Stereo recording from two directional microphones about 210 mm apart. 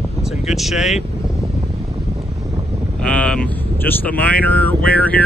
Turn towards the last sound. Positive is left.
turn(degrees=5)  # may be behind; listen again after turning